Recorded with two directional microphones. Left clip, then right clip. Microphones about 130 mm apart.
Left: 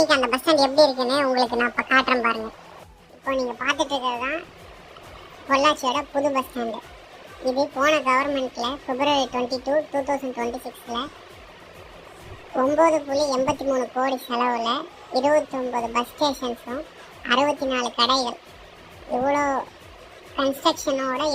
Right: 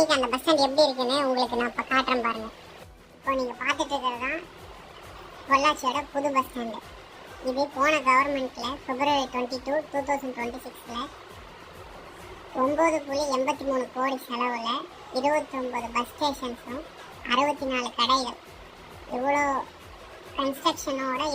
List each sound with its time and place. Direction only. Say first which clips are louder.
0.0 s a child's voice: left 4 dB; 15° left (ahead or behind)
5.5 s a child's voice: left 3 dB; 25° left (ahead or behind)
12.5 s a child's voice: left 5 dB; 10° left (ahead or behind)
14.0 s a child's voice: left 5 dB; 25° left (ahead or behind)